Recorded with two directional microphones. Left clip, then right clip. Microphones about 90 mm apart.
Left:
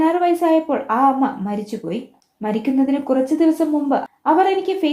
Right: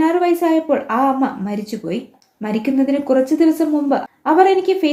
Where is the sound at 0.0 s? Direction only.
30° left (ahead or behind).